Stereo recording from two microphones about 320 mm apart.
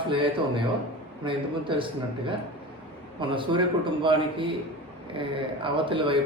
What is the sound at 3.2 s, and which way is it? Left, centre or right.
Speech, centre.